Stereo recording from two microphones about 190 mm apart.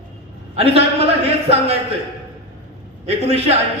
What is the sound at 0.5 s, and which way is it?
Speech, 30° right (ahead or behind).